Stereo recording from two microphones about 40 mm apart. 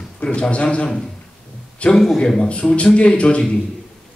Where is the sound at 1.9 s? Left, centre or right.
Centre.